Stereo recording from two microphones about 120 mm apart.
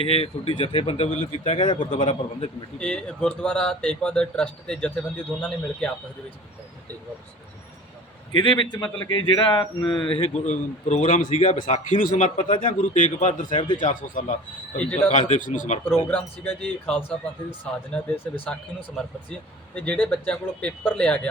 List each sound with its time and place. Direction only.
0.0 s speech: 55° left (ahead or behind)
1.6 s a man's voice: 45° left (ahead or behind)
2.0 s speech: 55° left (ahead or behind)
2.7 s speech: 10° left (ahead or behind)
8.3 s speech: 45° left (ahead or behind)
10.1 s a man's voice: 55° left (ahead or behind); by 14.3 s 90° left
14.8 s speech: 10° left (ahead or behind)
15.1 s a man's voice: 85° left
16.0 s speech: 15° left (ahead or behind)
19.7 s speech: 10° left (ahead or behind)